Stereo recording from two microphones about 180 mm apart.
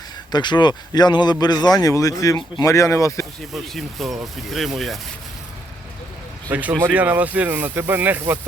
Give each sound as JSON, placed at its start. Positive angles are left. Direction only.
{"t": 0.3, "sound": "speech", "side_deg": 25}
{"t": 3.5, "sound": "speech", "side_deg": 0}
{"t": 6.5, "sound": "speech", "side_deg": -10}